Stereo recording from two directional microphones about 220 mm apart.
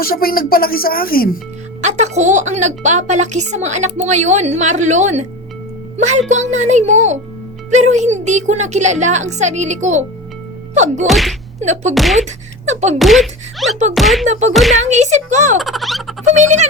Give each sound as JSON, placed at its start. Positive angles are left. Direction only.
{"t": 0.0, "sound": "speech", "side_deg": 40}
{"t": 1.8, "sound": "a woman's voice", "side_deg": -30}
{"t": 11.0, "sound": "speech", "side_deg": 0}
{"t": 11.6, "sound": "a woman's voice", "side_deg": -30}
{"t": 11.9, "sound": "speech", "side_deg": 0}
{"t": 12.2, "sound": "speech", "side_deg": -30}
{"t": 13.0, "sound": "speech", "side_deg": 0}
{"t": 14.3, "sound": "a woman's voice", "side_deg": -30}
{"t": 14.5, "sound": "speech", "side_deg": 0}
{"t": 14.8, "sound": "a woman's voice", "side_deg": -30}
{"t": 15.5, "sound": "speech", "side_deg": 0}
{"t": 16.3, "sound": "a woman's voice", "side_deg": -30}